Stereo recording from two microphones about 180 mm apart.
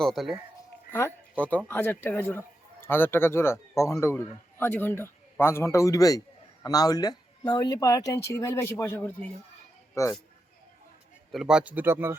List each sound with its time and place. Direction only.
0.0 s speech: centre (ahead or behind)
0.9 s a man's voice: 10° left (ahead or behind)
11.3 s speech: 5° right (ahead or behind)